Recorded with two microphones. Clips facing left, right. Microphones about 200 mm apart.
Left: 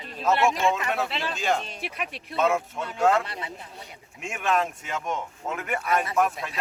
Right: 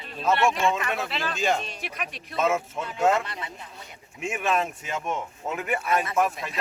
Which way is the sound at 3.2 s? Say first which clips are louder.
Left 1 dB; 30° left (ahead or behind).